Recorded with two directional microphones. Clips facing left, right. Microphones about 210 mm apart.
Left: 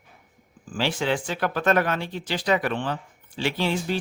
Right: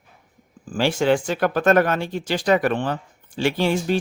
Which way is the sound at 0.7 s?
45° right (ahead or behind).